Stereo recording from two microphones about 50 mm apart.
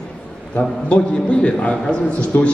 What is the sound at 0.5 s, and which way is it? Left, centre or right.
A man's voice, left.